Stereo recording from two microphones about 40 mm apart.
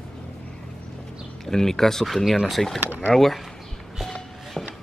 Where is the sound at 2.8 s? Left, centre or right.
Right.